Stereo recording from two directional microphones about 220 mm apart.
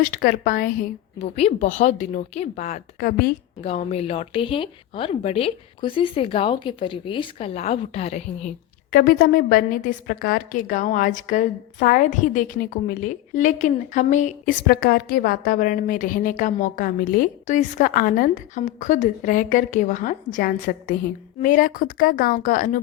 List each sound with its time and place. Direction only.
0.0 s a woman's voice: 40° left (ahead or behind)
1.2 s a woman's voice: 30° left (ahead or behind)
14.7 s a woman's voice: 45° left (ahead or behind)